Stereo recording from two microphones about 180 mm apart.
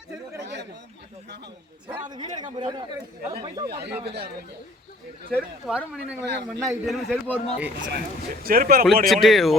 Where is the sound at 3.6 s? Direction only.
65° right (ahead or behind).